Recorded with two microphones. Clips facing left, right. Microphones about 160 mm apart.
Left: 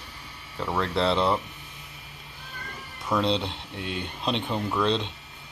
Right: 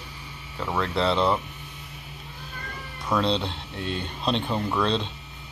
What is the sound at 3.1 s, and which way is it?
Speech, 15° left (ahead or behind).